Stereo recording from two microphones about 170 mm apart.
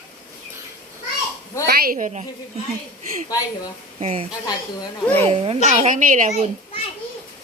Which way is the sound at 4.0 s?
35° right (ahead or behind).